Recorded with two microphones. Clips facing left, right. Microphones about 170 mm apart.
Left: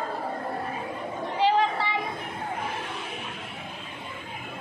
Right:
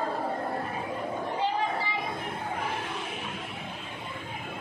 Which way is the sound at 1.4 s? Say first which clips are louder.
Left 8 dB; 90° left.